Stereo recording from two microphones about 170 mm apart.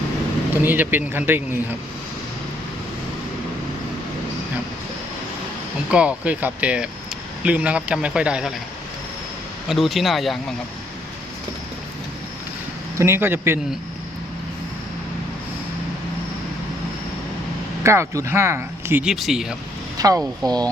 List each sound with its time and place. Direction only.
0.5 s speech: 10° right (ahead or behind)
5.9 s speech: 5° right (ahead or behind)
9.6 s speech: centre (ahead or behind)
13.0 s speech: 15° right (ahead or behind)
17.8 s speech: 15° right (ahead or behind)
19.1 s speech: centre (ahead or behind)
20.0 s speech: 20° right (ahead or behind)